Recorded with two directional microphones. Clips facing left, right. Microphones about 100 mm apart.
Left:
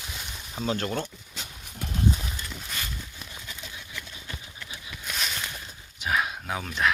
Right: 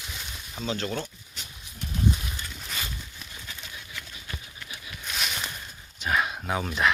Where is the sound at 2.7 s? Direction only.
Centre (ahead or behind).